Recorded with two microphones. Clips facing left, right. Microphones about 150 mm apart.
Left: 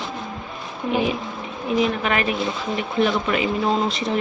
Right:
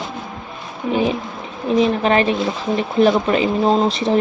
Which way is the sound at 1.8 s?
30° right (ahead or behind).